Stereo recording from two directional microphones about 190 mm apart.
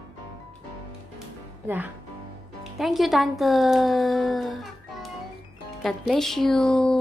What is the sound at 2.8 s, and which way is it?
Speech, centre (ahead or behind).